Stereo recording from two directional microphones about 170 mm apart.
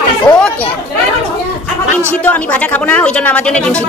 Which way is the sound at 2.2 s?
10° left (ahead or behind).